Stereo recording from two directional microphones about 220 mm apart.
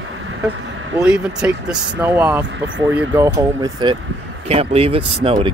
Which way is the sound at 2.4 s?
60° right (ahead or behind).